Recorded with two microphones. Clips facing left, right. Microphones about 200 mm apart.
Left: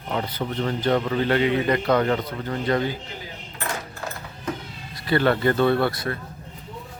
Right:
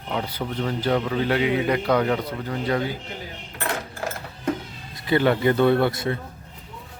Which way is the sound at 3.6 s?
80° right.